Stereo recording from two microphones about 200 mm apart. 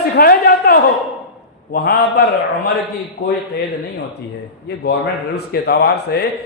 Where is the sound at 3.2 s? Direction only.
45° left (ahead or behind).